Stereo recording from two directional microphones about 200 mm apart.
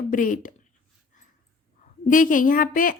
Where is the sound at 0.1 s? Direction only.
40° left (ahead or behind).